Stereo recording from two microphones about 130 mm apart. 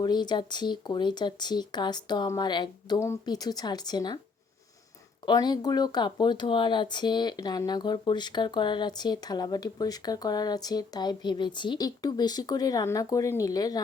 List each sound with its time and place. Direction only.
0.0 s speech: 35° left (ahead or behind)
5.2 s speech: 30° left (ahead or behind)